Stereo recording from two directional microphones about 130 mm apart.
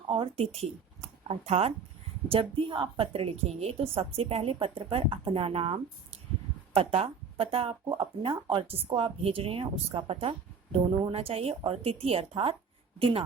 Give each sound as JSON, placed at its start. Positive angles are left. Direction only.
{"t": 0.1, "sound": "a woman's voice", "side_deg": -50}